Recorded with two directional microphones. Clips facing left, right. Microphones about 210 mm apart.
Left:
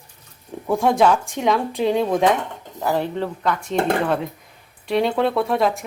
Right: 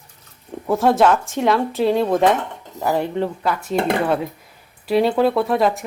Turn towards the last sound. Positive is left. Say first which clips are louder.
# right 2 dB
turn(degrees=0)  # may be behind; listen again after turning